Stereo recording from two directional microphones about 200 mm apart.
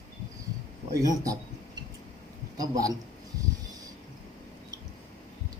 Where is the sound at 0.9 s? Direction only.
15° right (ahead or behind).